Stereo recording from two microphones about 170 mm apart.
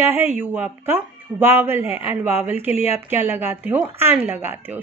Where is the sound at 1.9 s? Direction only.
35° left (ahead or behind).